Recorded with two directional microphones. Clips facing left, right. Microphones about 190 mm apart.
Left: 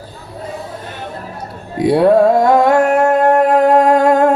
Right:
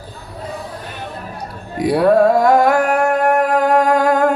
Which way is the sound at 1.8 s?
25° left (ahead or behind).